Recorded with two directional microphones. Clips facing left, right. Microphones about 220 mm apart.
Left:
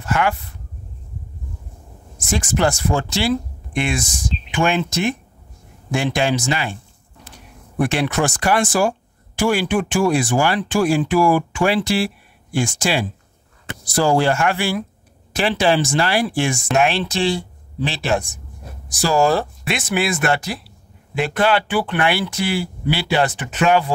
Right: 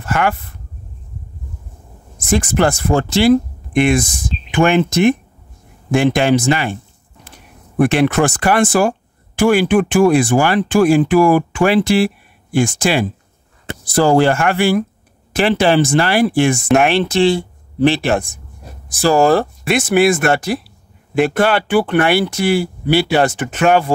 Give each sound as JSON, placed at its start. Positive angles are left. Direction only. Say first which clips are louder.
{"t": 0.0, "sound": "speech", "louder": "right 2 dB", "side_deg": -55}
{"t": 2.2, "sound": "speech", "louder": "right 4 dB", "side_deg": -55}